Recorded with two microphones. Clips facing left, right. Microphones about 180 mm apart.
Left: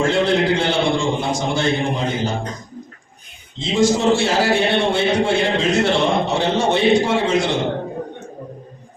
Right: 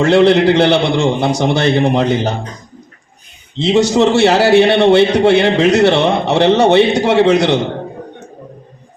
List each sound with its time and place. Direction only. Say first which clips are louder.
0.0 s a man's voice: right 8 dB; 70° right (ahead or behind)
3.6 s a man's voice: right 6 dB; 70° right (ahead or behind)